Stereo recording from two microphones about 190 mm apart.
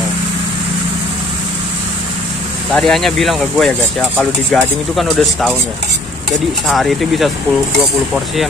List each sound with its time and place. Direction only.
2.7 s speech: centre (ahead or behind)
6.7 s speech: centre (ahead or behind)